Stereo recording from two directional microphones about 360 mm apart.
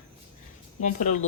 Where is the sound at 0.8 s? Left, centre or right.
Centre.